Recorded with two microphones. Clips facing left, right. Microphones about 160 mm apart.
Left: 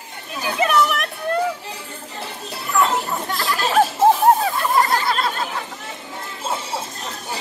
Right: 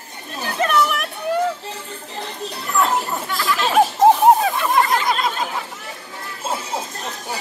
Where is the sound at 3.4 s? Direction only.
40° left (ahead or behind).